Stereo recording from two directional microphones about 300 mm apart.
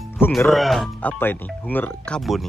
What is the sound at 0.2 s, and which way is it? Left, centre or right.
Speech, centre.